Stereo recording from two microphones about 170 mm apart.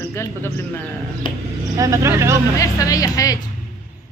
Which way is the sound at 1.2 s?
30° left (ahead or behind).